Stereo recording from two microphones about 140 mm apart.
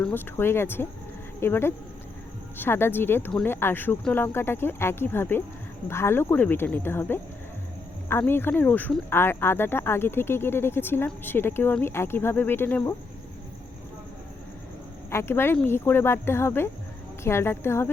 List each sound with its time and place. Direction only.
0.0 s speech: 15° left (ahead or behind)
15.1 s speech: 20° left (ahead or behind)